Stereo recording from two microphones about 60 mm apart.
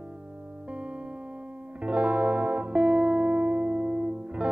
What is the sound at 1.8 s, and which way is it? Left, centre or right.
Music, right.